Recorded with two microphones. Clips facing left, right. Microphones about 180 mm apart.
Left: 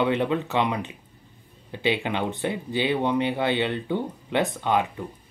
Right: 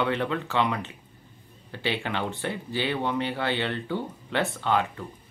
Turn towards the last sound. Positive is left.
turn(degrees=15)  # may be behind; listen again after turning